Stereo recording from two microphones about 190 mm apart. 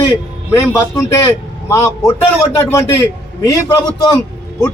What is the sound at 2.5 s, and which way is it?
Speech, 15° left (ahead or behind).